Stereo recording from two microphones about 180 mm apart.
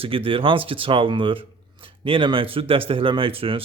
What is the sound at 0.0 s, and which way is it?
Speech, 30° right (ahead or behind).